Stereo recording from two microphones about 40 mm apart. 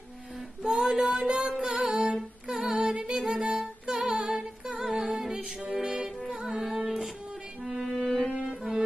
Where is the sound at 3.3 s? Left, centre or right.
Right.